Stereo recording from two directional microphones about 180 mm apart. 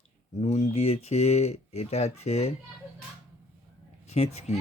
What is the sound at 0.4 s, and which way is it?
Speech, 40° left (ahead or behind).